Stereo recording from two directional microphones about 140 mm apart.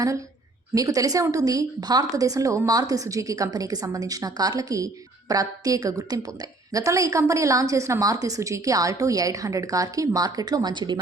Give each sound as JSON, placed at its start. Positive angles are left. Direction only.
{"t": 0.7, "sound": "a woman's voice", "side_deg": -25}